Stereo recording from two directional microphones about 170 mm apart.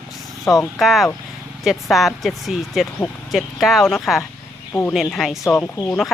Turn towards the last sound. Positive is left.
turn(degrees=10)  # may be behind; listen again after turning